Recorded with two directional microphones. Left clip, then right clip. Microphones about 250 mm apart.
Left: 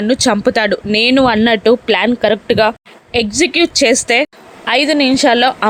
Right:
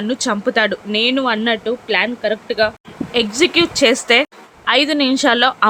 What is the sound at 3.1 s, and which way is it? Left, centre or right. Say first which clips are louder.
A woman's voice: left 1 dB; centre.